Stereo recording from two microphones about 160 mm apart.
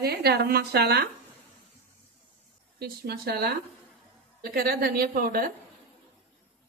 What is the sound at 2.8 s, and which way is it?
A woman's voice, 75° right (ahead or behind).